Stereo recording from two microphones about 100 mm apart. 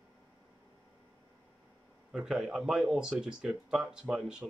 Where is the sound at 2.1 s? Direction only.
5° right (ahead or behind).